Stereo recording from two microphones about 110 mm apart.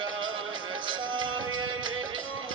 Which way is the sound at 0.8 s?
45° right (ahead or behind).